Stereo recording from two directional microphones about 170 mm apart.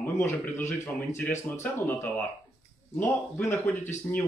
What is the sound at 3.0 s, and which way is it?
Speech, 15° left (ahead or behind).